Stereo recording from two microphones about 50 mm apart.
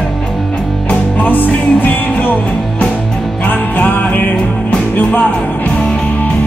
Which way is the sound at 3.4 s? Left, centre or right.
Left.